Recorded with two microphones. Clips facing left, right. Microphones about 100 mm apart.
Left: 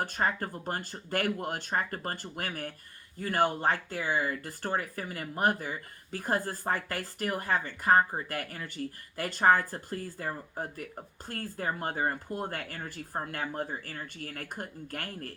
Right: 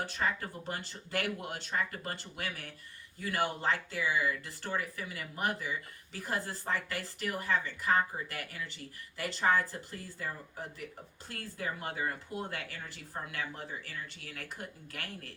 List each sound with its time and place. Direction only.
0.0 s speech: 50° left (ahead or behind)